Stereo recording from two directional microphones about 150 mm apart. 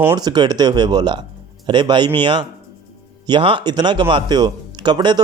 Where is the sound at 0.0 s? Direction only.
20° right (ahead or behind).